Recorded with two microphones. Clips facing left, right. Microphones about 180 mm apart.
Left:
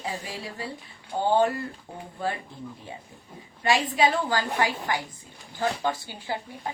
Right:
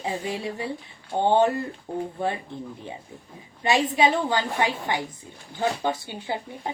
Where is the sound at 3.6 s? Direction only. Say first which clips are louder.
Right 2 dB; 20° right (ahead or behind).